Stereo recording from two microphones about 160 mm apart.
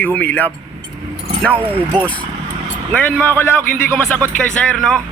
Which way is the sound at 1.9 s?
10° left (ahead or behind).